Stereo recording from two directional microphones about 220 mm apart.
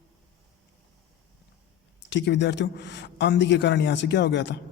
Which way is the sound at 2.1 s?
55° left (ahead or behind).